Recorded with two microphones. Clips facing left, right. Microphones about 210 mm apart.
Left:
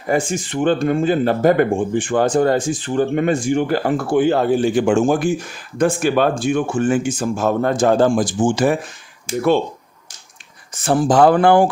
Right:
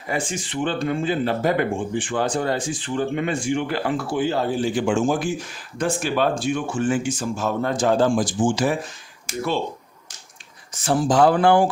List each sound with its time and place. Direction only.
0.1 s speech: 45° left (ahead or behind)
10.8 s speech: 55° left (ahead or behind)